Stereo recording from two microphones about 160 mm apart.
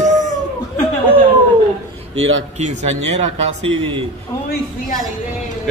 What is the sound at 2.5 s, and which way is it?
Speech, 45° right (ahead or behind).